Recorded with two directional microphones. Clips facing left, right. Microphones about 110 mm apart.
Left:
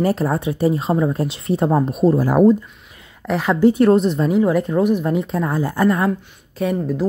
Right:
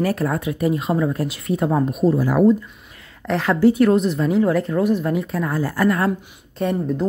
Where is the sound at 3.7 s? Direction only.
30° left (ahead or behind).